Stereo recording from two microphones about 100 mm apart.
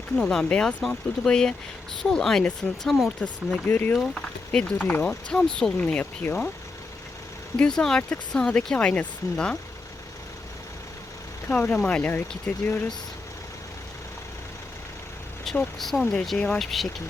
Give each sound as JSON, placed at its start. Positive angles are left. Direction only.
{"t": 0.2, "sound": "speech", "side_deg": 5}
{"t": 3.7, "sound": "speech", "side_deg": 20}
{"t": 3.9, "sound": "speech", "side_deg": 10}
{"t": 7.5, "sound": "speech", "side_deg": 10}
{"t": 11.4, "sound": "speech", "side_deg": 20}
{"t": 15.5, "sound": "speech", "side_deg": 5}